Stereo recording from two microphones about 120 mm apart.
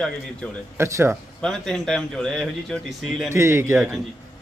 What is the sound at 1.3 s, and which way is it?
Speech, 5° left (ahead or behind).